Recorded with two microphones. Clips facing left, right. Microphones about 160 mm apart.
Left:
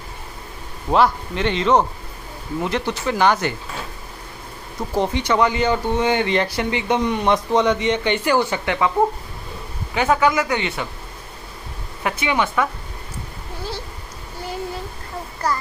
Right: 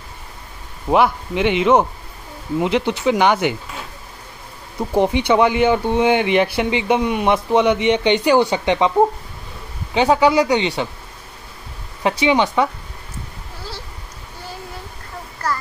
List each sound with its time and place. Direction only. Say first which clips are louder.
0.8 s speech: right 1 dB; 15° right (ahead or behind)
4.7 s speech: right 4 dB; 15° right (ahead or behind)
9.9 s speech: right 4 dB; 25° right (ahead or behind)
12.0 s speech: right 5 dB; 25° right (ahead or behind)
15.4 s child singing: left 1 dB; 10° left (ahead or behind)